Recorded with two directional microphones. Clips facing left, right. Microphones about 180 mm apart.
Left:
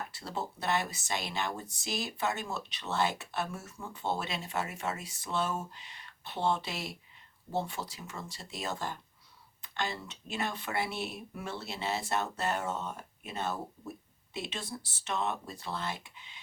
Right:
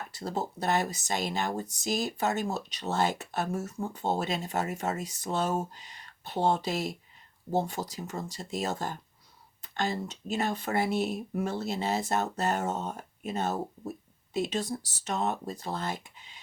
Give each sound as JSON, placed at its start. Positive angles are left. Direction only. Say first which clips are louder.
{"t": 0.1, "sound": "speech", "louder": "right 5 dB", "side_deg": -40}